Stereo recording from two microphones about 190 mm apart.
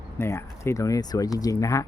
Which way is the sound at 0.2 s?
15° left (ahead or behind).